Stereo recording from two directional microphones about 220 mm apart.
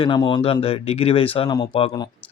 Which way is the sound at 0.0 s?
20° left (ahead or behind).